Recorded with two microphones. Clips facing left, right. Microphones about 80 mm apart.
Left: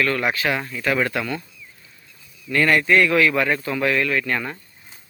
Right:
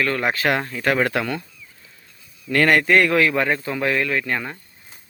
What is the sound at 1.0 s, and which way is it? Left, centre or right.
Speech, right.